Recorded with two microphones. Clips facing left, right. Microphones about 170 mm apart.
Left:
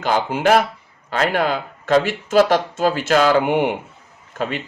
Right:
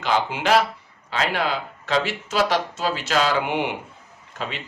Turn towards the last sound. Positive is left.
turn(degrees=50)  # may be behind; listen again after turning